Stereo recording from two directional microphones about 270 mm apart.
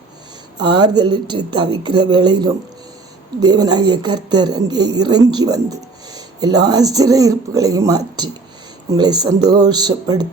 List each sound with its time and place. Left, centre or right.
0.6 s speech: centre